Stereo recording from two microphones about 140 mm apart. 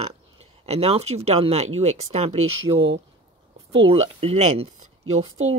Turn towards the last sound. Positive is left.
turn(degrees=-45)  # may be behind; listen again after turning